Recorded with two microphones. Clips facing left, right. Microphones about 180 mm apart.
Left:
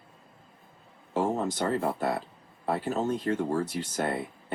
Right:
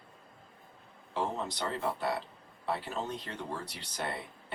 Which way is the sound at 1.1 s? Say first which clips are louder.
Left 7 dB; 45° left (ahead or behind).